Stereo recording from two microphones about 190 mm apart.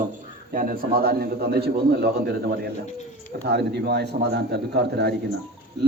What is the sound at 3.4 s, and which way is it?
A man's voice, 60° right (ahead or behind).